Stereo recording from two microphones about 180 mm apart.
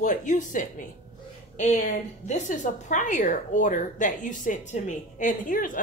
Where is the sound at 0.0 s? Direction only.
45° left (ahead or behind).